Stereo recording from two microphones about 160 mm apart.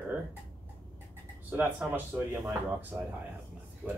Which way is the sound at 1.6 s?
10° right (ahead or behind).